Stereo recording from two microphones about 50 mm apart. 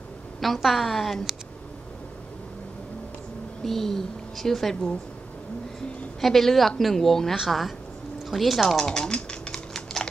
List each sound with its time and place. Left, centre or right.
0.4 s a woman's voice: centre
3.6 s a woman's voice: centre
6.2 s a woman's voice: centre
8.3 s typing: centre